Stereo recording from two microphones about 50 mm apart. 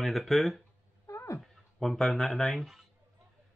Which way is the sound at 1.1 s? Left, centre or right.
Left.